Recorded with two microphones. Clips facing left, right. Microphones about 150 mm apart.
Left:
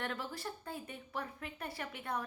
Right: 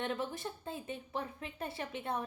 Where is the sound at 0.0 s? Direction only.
20° right (ahead or behind).